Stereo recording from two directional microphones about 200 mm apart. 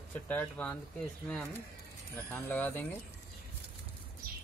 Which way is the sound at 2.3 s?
10° left (ahead or behind).